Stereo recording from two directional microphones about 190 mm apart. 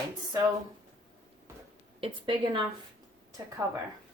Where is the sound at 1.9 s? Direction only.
25° right (ahead or behind).